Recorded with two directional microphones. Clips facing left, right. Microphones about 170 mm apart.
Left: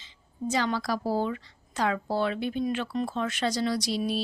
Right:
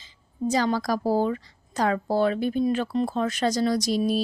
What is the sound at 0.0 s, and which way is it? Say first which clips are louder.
A woman's voice: right 5 dB; 40° right (ahead or behind).